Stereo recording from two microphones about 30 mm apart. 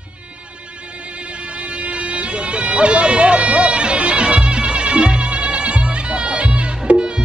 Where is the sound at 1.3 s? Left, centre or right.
Right.